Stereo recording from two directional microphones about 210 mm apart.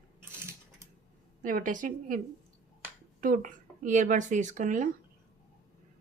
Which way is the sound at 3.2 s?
40° right (ahead or behind).